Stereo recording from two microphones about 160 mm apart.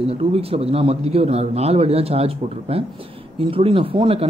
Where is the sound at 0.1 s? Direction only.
40° right (ahead or behind).